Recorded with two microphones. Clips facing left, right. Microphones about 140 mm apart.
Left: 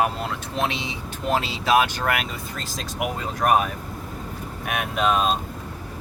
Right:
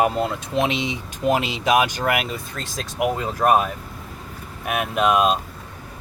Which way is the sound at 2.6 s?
Centre (ahead or behind).